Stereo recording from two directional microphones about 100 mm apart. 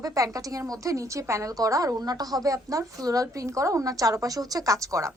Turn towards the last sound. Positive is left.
turn(degrees=-35)  # may be behind; listen again after turning